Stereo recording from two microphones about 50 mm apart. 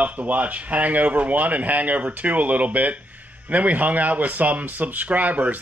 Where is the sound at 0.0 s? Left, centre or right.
Right.